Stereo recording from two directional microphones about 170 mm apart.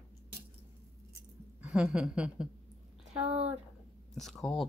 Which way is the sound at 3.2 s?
35° right (ahead or behind).